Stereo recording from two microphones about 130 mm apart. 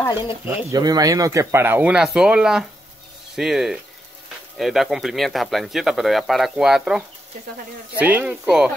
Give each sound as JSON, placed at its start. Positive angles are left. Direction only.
{"t": 0.1, "sound": "speech", "side_deg": 40}
{"t": 0.7, "sound": "speech", "side_deg": -30}